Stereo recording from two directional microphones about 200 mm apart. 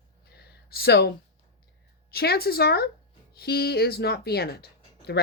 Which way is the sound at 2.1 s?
50° left (ahead or behind).